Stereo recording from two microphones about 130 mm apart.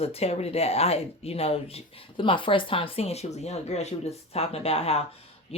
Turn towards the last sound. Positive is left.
turn(degrees=50)  # may be behind; listen again after turning